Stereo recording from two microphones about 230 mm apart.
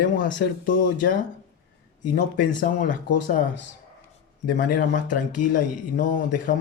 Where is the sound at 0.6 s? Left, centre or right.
Left.